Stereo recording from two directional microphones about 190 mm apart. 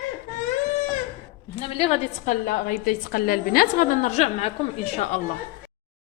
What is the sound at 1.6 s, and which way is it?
Speech, 30° left (ahead or behind).